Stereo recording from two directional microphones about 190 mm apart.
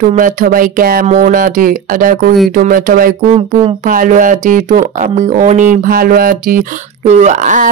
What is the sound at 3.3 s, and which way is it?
Speech, 35° right (ahead or behind).